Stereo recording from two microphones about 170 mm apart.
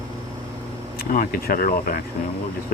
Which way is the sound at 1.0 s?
55° left (ahead or behind).